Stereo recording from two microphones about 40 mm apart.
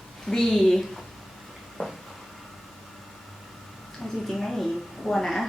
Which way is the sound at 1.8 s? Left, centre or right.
Left.